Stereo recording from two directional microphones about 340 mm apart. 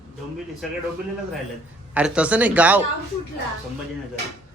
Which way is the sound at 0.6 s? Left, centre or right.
Centre.